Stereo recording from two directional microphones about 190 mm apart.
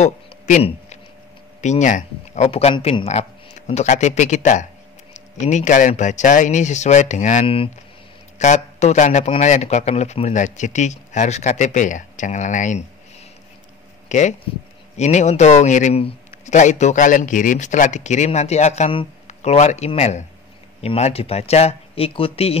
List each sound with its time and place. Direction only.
0.0 s a sound: 40° left (ahead or behind)
1.6 s speech: 40° left (ahead or behind)
14.0 s speech: 40° left (ahead or behind)